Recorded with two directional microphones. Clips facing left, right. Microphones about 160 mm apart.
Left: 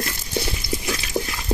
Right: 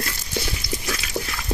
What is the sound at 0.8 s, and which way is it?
Dog, 20° left (ahead or behind).